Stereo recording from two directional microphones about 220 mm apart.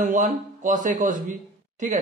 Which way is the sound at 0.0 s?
35° right (ahead or behind).